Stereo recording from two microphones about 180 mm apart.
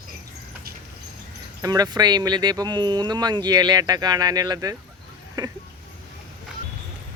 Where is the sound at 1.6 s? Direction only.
20° right (ahead or behind).